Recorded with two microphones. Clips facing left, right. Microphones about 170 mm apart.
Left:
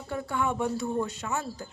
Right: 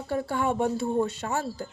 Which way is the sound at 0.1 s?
30° right (ahead or behind).